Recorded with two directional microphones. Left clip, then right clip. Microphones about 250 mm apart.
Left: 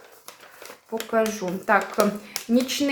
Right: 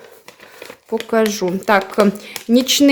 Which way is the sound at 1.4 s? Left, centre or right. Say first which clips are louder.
Right 6 dB; right.